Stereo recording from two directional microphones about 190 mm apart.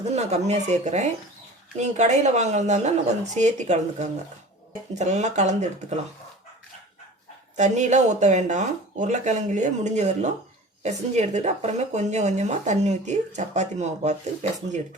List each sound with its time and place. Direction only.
0.0 s speech: 35° right (ahead or behind)
7.5 s speech: 40° right (ahead or behind)